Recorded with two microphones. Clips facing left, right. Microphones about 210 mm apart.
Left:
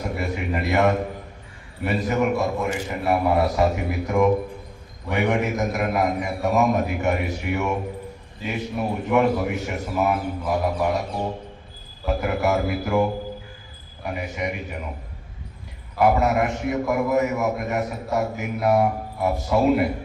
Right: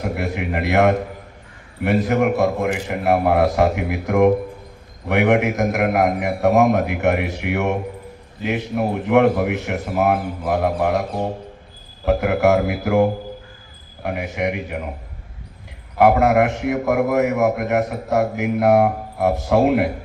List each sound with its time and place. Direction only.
0.0 s a man's voice: 65° right (ahead or behind)
12.0 s a man's voice: 70° right (ahead or behind)
16.0 s a man's voice: 60° right (ahead or behind)